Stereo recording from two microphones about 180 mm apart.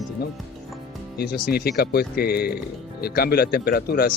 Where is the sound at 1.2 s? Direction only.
55° left (ahead or behind).